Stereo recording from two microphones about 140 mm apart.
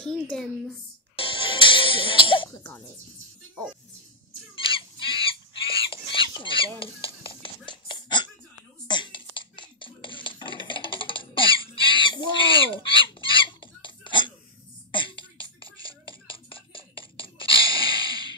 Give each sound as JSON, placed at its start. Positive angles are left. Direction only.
{"t": 0.0, "sound": "a woman's voice", "side_deg": 5}
{"t": 1.1, "sound": "music", "side_deg": 40}
{"t": 2.5, "sound": "speech", "side_deg": 20}
{"t": 4.6, "sound": "a sound", "side_deg": 40}
{"t": 14.9, "sound": "throat clearing", "side_deg": 35}